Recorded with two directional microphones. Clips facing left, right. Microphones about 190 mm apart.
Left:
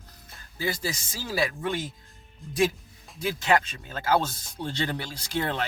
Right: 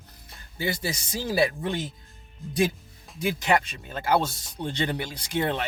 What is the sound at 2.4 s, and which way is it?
Speech, centre (ahead or behind).